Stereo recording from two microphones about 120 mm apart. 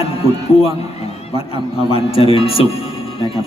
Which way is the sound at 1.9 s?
50° left (ahead or behind).